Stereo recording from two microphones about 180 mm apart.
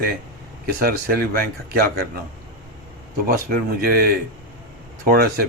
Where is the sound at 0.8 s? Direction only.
55° right (ahead or behind).